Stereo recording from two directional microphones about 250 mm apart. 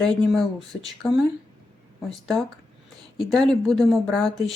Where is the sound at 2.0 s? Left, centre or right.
Centre.